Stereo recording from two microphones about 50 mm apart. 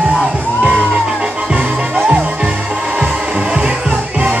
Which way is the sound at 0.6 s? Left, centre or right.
Right.